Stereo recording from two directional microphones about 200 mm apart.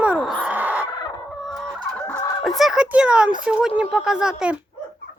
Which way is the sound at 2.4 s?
Centre (ahead or behind).